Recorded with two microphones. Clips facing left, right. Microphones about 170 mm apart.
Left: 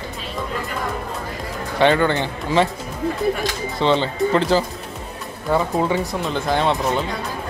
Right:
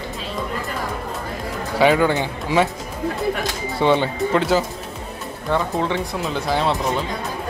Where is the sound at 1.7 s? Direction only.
5° right (ahead or behind).